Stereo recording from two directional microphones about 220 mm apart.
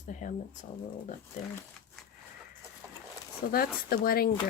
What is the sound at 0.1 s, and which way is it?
Speech, 35° left (ahead or behind).